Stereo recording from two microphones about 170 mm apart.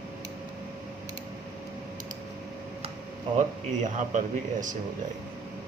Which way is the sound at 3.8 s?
50° right (ahead or behind).